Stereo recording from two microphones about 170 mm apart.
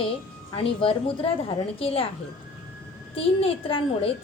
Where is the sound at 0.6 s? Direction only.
35° left (ahead or behind).